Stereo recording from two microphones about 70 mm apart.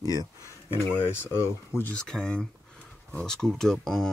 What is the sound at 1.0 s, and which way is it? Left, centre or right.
Speech, left.